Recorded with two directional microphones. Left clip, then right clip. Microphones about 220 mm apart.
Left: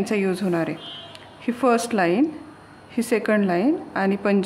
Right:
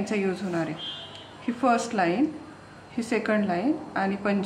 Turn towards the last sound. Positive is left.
turn(degrees=50)  # may be behind; listen again after turning